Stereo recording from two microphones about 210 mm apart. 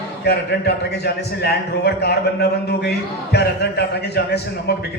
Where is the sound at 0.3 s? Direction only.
50° left (ahead or behind).